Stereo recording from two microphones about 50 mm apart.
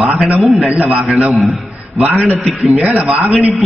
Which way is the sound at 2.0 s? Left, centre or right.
Right.